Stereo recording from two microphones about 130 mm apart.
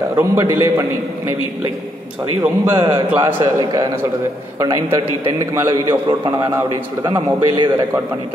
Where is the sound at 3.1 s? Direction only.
15° right (ahead or behind); by 7.8 s 35° right (ahead or behind).